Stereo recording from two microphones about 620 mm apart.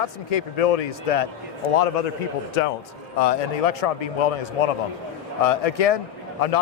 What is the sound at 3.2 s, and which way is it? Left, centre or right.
Speech, left.